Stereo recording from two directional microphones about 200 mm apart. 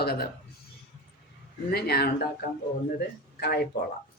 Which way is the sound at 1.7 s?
50° left (ahead or behind).